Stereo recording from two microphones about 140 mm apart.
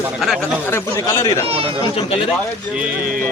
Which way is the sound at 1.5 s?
40° right (ahead or behind).